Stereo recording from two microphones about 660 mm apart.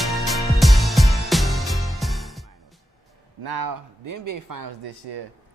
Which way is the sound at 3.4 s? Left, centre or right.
Right.